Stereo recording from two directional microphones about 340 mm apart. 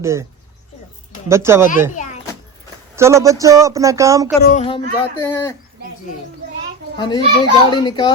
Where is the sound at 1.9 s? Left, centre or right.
Left.